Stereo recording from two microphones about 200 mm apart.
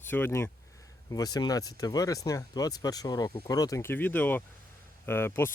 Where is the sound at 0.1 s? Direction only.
10° left (ahead or behind).